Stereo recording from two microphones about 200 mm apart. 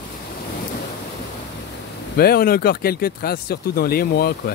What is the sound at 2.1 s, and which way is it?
Speech, 50° left (ahead or behind).